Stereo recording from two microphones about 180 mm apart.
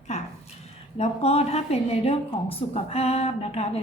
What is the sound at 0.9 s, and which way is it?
A woman's voice, 35° left (ahead or behind).